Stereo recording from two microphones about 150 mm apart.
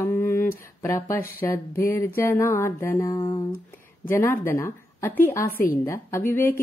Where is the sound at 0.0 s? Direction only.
15° left (ahead or behind).